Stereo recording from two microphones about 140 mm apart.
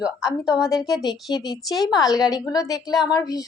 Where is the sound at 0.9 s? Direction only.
25° left (ahead or behind).